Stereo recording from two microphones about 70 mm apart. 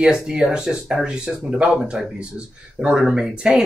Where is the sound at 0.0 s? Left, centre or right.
Centre.